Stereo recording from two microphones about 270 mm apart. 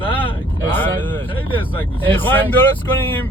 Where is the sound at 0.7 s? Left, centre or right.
Centre.